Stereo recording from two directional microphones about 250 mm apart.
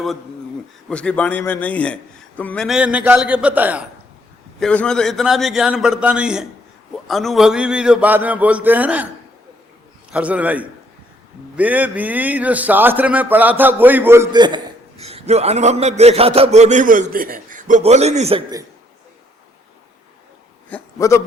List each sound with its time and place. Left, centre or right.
0.9 s a man's voice: centre
4.6 s a man's voice: centre
10.1 s a man's voice: centre; by 18.6 s right
20.7 s speech: centre